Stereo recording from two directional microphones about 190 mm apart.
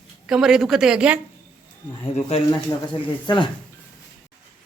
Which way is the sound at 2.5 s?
20° left (ahead or behind).